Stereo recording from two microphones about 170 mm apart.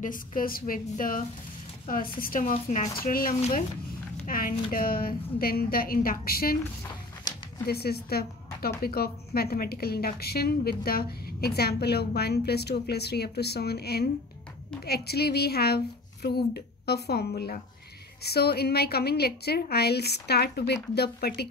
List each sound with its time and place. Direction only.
0.0 s a woman's voice: 50° left (ahead or behind)
6.8 s a sound: 20° left (ahead or behind)
7.6 s a woman's voice: 70° left (ahead or behind)